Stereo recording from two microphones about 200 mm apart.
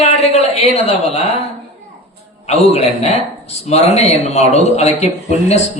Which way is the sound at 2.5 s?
30° left (ahead or behind).